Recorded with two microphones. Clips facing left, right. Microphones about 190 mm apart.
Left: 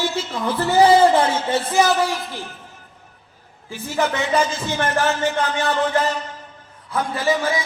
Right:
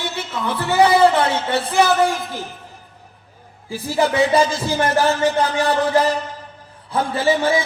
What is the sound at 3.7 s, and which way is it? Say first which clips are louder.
A man's voice: right 3 dB; 35° right (ahead or behind).